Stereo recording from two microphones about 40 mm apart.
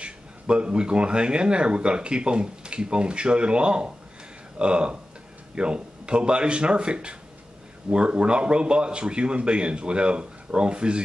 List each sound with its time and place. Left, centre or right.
0.0 s speech: right